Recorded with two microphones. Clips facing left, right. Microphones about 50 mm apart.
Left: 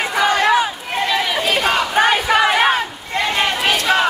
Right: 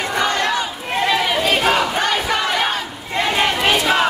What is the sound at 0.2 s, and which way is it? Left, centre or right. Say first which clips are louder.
Crowd: left 6 dB; centre.